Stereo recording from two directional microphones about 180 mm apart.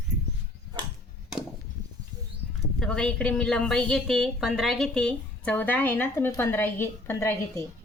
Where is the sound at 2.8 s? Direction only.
5° left (ahead or behind).